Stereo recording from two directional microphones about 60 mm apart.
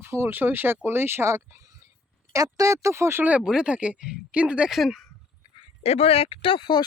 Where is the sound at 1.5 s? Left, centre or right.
Right.